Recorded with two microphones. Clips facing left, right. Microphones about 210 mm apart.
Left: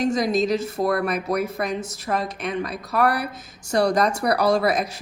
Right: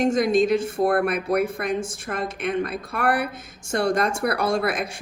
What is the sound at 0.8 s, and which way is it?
Speech, 55° right (ahead or behind).